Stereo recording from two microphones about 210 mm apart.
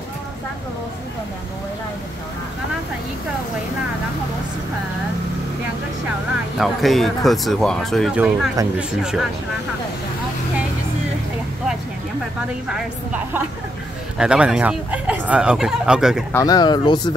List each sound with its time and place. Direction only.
6.6 s speech: centre (ahead or behind)
12.6 s speech: 5° right (ahead or behind)
16.3 s speech: 15° left (ahead or behind)